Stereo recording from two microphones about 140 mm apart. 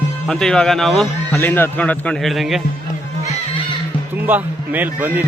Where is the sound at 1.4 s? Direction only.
15° left (ahead or behind); by 2.6 s centre (ahead or behind).